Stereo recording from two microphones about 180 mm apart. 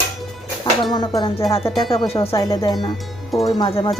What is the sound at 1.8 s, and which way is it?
Speech, centre (ahead or behind).